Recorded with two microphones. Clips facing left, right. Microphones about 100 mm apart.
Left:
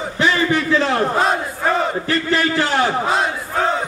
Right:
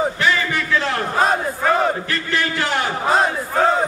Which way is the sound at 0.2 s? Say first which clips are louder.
Left 3 dB; 25° left (ahead or behind).